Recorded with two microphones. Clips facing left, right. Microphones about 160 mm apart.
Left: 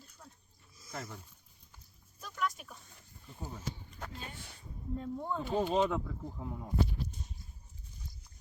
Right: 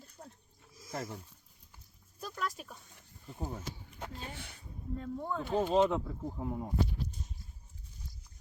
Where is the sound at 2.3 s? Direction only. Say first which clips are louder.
Left 3 dB; 35° right (ahead or behind).